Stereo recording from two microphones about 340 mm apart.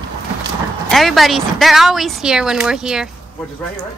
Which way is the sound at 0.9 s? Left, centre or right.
Centre.